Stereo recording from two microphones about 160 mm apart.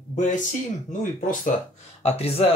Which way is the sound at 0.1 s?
50° left (ahead or behind).